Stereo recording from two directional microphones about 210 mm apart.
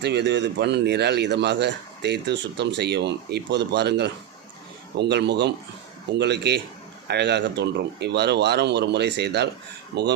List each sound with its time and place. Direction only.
0.0 s speech: 55° right (ahead or behind)